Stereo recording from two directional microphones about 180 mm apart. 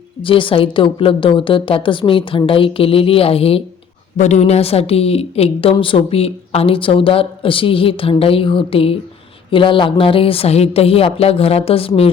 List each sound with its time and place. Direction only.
0.2 s a woman's voice: 30° left (ahead or behind)